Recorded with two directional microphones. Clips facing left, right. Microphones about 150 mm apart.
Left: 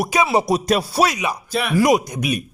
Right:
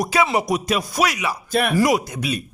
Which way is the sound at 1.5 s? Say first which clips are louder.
Right 5 dB; 50° right (ahead or behind).